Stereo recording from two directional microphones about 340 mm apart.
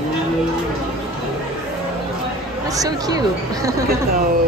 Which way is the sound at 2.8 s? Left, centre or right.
Centre.